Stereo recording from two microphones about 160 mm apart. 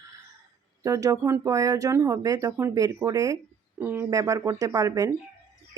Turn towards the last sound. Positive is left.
turn(degrees=-20)  # may be behind; listen again after turning